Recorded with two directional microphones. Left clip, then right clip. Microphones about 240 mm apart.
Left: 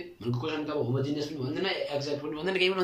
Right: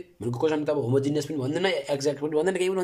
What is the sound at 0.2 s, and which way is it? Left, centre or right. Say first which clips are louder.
Speech: right 8 dB; right.